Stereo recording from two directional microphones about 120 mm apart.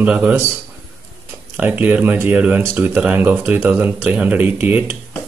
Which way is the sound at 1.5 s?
10° right (ahead or behind).